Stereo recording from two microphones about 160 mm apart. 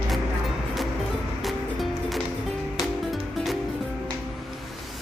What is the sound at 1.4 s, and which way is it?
Music, centre (ahead or behind).